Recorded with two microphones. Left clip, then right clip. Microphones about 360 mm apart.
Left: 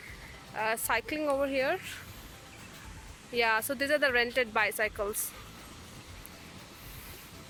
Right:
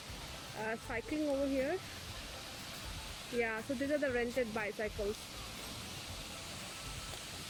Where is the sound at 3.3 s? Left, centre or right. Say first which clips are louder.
Left 9 dB; left.